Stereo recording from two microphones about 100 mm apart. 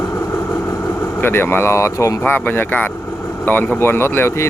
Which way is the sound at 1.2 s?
20° left (ahead or behind).